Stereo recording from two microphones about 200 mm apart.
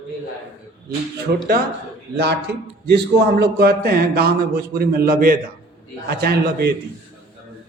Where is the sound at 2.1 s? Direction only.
55° right (ahead or behind).